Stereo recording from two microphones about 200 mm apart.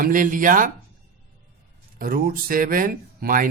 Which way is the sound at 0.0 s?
40° right (ahead or behind).